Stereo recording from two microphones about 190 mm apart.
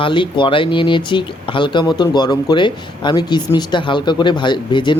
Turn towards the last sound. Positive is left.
turn(degrees=25)  # may be behind; listen again after turning